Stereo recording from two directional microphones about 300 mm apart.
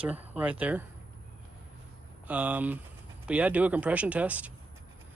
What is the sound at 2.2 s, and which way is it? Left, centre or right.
Speech, centre.